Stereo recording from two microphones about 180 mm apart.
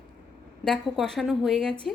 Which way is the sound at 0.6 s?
5° left (ahead or behind).